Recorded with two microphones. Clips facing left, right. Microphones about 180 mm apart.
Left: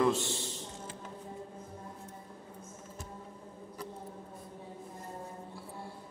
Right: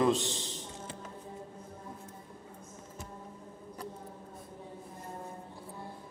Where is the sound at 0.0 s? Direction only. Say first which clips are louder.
Right 1 dB; 20° right (ahead or behind).